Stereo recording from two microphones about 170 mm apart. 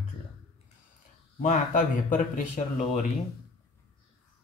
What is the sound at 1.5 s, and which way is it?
Speech, 50° left (ahead or behind).